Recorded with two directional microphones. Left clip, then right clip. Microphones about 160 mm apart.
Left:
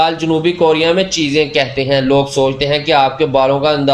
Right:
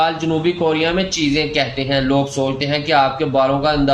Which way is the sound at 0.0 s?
40° left (ahead or behind).